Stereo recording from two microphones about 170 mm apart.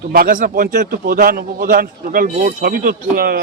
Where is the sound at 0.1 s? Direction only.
60° right (ahead or behind).